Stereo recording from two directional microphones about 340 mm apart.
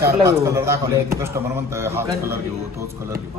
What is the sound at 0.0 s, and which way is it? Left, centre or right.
A man's voice, centre.